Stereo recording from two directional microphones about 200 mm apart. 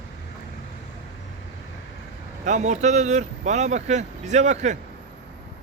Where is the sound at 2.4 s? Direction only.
35° right (ahead or behind).